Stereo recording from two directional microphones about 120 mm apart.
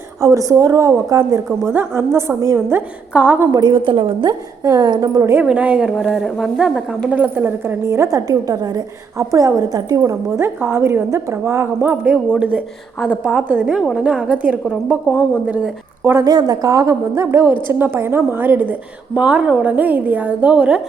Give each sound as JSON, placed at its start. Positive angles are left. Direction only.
{"t": 0.2, "sound": "a woman's voice", "side_deg": -25}
{"t": 3.5, "sound": "a woman's voice", "side_deg": -40}
{"t": 4.6, "sound": "a woman's voice", "side_deg": -30}
{"t": 5.3, "sound": "a woman's voice", "side_deg": -10}
{"t": 7.1, "sound": "a woman's voice", "side_deg": -15}
{"t": 16.1, "sound": "a woman's voice", "side_deg": -35}